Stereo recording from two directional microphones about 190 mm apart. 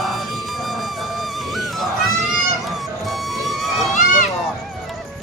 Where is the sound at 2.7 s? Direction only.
Centre (ahead or behind).